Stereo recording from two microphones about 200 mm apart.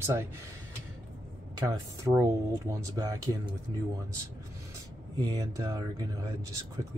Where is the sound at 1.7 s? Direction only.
15° right (ahead or behind).